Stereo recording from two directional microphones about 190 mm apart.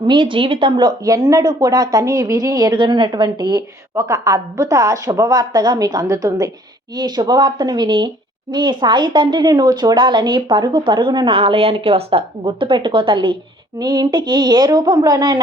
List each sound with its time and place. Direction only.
0.1 s a woman's voice: 25° right (ahead or behind)